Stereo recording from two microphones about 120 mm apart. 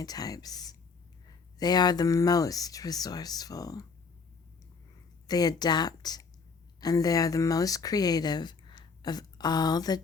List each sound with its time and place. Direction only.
0.0 s speech: 35° left (ahead or behind)
5.3 s speech: 35° left (ahead or behind)